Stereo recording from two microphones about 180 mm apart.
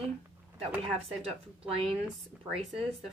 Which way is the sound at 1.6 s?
30° right (ahead or behind).